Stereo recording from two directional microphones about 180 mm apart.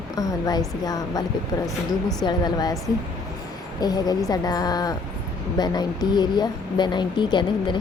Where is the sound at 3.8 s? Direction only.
20° left (ahead or behind).